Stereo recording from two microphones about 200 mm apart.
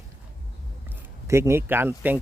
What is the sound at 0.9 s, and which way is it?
Speech, 15° right (ahead or behind).